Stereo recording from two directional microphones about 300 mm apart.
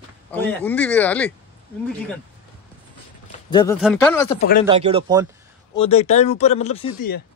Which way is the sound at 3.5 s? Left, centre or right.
Centre.